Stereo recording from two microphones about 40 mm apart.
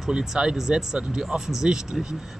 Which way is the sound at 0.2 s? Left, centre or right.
Centre.